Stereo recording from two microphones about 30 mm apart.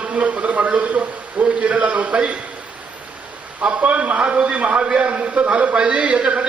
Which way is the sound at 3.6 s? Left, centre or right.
Right.